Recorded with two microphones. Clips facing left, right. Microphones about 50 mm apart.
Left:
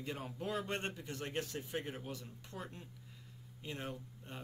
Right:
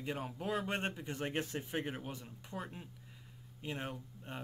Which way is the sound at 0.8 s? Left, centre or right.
Centre.